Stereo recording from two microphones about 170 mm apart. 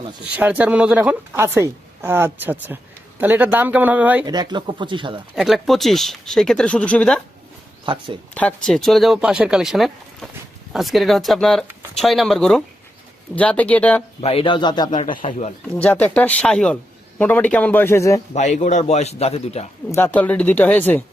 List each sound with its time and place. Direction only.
0.3 s a woman's voice: 10° right (ahead or behind)
4.3 s speech: 25° right (ahead or behind)
5.3 s speech: centre (ahead or behind)
7.9 s speech: 30° right (ahead or behind)
8.4 s speech: 5° left (ahead or behind)
14.2 s speech: 35° left (ahead or behind)
14.8 s a man's voice: 45° left (ahead or behind)
15.1 s speech: 30° left (ahead or behind)
15.7 s speech: 10° left (ahead or behind)
18.3 s a man's voice: 45° left (ahead or behind)
19.9 s speech: 10° left (ahead or behind)